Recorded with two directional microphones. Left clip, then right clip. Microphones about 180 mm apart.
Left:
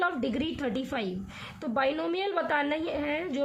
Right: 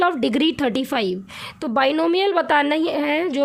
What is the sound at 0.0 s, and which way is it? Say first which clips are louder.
A woman's voice: right 11 dB; 55° right (ahead or behind).